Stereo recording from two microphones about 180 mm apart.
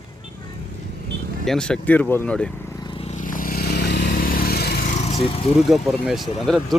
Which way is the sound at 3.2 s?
50° left (ahead or behind).